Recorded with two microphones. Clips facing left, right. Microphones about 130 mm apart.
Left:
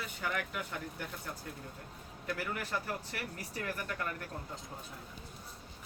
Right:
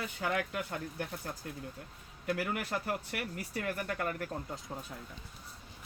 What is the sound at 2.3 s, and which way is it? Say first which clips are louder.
Speech: right 3 dB; 45° right (ahead or behind).